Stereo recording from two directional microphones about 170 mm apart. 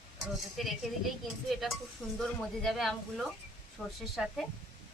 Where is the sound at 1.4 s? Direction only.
Centre (ahead or behind).